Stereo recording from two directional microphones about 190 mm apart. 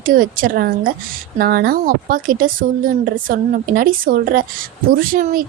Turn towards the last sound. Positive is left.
turn(degrees=-45)  # may be behind; listen again after turning